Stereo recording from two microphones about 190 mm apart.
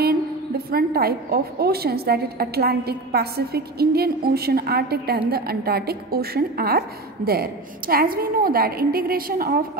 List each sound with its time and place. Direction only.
0.7 s a woman's voice: 55° right (ahead or behind)